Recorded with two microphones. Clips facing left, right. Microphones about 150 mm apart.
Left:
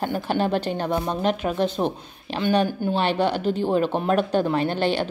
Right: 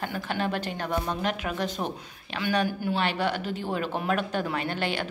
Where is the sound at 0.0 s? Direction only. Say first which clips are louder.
Left 6 dB; 35° left (ahead or behind).